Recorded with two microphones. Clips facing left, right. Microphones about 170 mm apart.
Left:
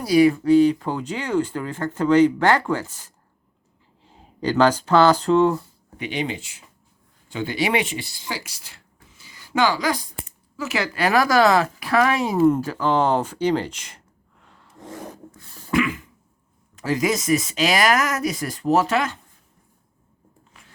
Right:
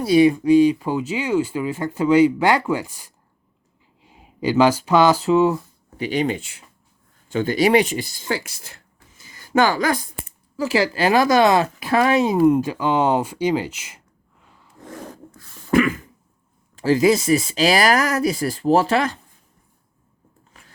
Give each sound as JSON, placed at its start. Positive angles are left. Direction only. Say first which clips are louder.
{"t": 0.0, "sound": "speech", "louder": "right 1 dB", "side_deg": -25}
{"t": 6.0, "sound": "speech", "louder": "right 5 dB", "side_deg": -40}
{"t": 10.6, "sound": "speech", "louder": "right 4 dB", "side_deg": -30}
{"t": 15.7, "sound": "a sound", "louder": "right 4 dB", "side_deg": -45}
{"t": 16.7, "sound": "speech", "louder": "right 6 dB", "side_deg": -30}